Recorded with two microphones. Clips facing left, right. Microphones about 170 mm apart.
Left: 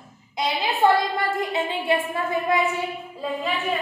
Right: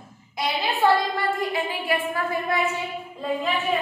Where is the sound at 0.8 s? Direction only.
20° left (ahead or behind).